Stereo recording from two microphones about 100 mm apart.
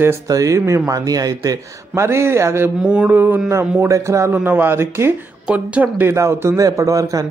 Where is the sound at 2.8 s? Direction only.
10° right (ahead or behind).